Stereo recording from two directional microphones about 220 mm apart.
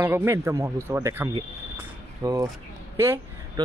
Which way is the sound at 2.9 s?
10° right (ahead or behind).